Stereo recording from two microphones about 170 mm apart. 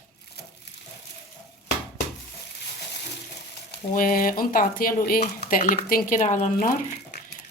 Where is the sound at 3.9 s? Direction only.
55° left (ahead or behind).